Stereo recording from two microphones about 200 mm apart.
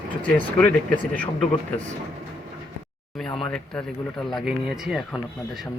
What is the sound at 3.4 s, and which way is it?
Speech, 5° left (ahead or behind).